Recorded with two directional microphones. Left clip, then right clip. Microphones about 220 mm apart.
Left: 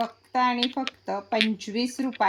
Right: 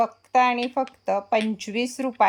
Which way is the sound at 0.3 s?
20° right (ahead or behind).